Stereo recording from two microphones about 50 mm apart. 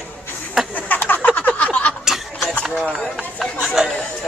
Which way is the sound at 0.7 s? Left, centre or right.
Left.